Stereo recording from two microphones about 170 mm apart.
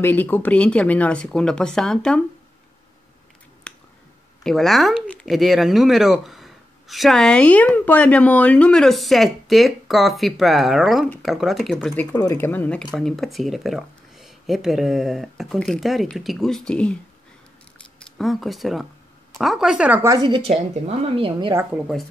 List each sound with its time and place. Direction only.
0.0 s speech: 10° left (ahead or behind)
3.7 s finger snapping: 5° left (ahead or behind)
4.4 s speech: centre (ahead or behind)
11.9 s speech: 10° left (ahead or behind)
17.7 s camera: 5° left (ahead or behind)
19.3 s speech: centre (ahead or behind)
20.1 s a woman's voice: 25° right (ahead or behind)
21.5 s speech: 5° right (ahead or behind)